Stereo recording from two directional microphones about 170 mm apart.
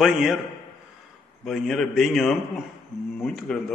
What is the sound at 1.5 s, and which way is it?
A man's voice, centre (ahead or behind).